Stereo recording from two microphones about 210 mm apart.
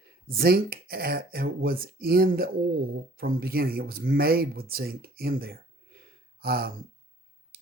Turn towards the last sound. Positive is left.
turn(degrees=-45)  # may be behind; listen again after turning